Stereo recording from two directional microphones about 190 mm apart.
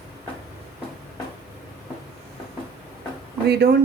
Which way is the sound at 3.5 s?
60° right (ahead or behind).